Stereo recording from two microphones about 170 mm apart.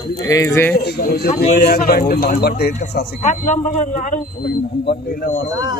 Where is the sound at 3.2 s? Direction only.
50° left (ahead or behind).